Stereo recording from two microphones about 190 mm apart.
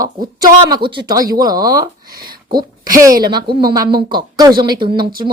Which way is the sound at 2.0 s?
50° right (ahead or behind).